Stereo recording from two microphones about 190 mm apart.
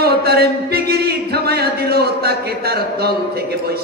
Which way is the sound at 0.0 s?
55° right (ahead or behind).